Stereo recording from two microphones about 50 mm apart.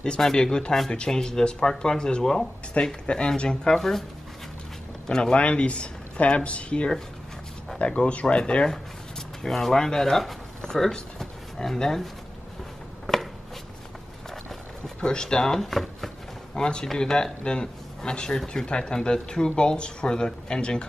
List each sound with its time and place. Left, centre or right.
0.2 s speech: centre
2.8 s speech: left; by 4.0 s centre
5.0 s speech: centre
9.4 s speech: centre
13.0 s a sound: centre
15.0 s speech: centre
16.5 s a man's voice: centre